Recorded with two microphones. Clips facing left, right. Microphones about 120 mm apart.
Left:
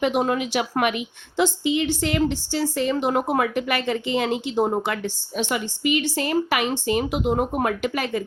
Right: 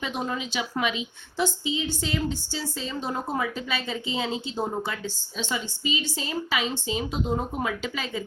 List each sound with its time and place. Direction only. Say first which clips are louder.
0.0 s a woman's voice: left 9 dB; 70° left (ahead or behind)